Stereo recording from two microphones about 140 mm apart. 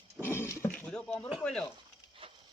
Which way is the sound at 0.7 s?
5° left (ahead or behind).